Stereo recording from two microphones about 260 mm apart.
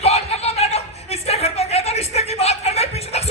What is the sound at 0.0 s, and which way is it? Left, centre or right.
Chuckle, left.